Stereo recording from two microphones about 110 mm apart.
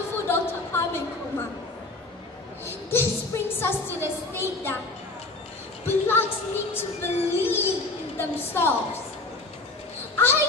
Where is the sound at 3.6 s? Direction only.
20° left (ahead or behind).